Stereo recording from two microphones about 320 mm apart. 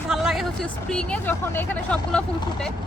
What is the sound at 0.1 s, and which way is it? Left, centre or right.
Speech, centre.